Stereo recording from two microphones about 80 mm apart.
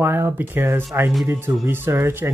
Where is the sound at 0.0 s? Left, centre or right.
Right.